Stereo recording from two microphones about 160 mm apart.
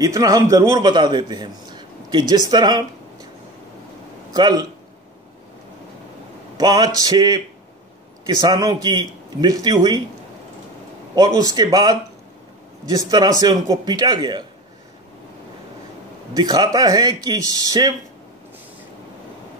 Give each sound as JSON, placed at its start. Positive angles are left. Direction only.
{"t": 0.0, "sound": "a man's voice", "side_deg": -20}
{"t": 4.3, "sound": "a man's voice", "side_deg": -25}
{"t": 6.5, "sound": "a man's voice", "side_deg": -25}
{"t": 11.1, "sound": "a man's voice", "side_deg": -25}
{"t": 16.3, "sound": "a man's voice", "side_deg": -25}